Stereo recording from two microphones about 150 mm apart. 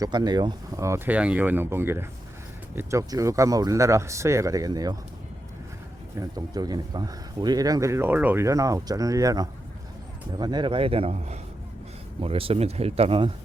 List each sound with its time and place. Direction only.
0.0 s speech: 25° right (ahead or behind)
6.1 s speech: 25° right (ahead or behind)